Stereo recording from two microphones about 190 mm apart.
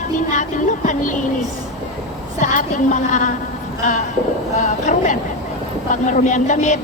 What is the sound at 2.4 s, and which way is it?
Child singing, 40° left (ahead or behind).